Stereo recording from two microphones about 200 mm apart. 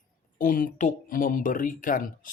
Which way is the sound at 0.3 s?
45° left (ahead or behind).